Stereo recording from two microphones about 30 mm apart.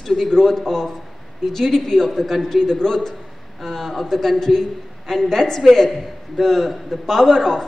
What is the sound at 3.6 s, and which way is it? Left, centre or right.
A man's voice, centre.